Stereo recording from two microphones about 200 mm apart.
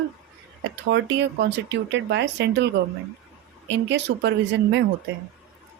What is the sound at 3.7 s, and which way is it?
Speech, 60° right (ahead or behind).